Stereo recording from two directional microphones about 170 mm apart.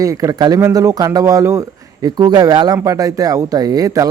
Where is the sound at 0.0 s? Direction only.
20° right (ahead or behind).